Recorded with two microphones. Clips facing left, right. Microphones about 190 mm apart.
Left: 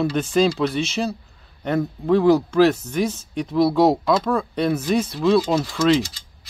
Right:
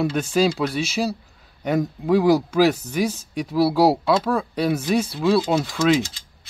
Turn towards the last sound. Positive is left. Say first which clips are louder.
# left 1 dB
turn(degrees=-10)  # may be behind; listen again after turning